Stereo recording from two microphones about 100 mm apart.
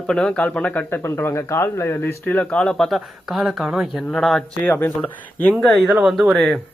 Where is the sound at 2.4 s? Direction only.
10° left (ahead or behind).